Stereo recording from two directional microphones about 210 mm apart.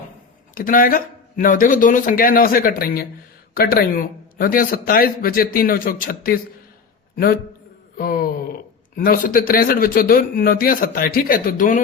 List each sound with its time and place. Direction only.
0.5 s a man's voice: 40° left (ahead or behind)
7.9 s a sound: 45° left (ahead or behind)
9.0 s a man's voice: 40° left (ahead or behind)